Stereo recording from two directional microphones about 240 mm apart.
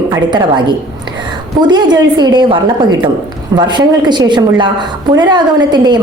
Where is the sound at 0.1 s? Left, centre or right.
Centre.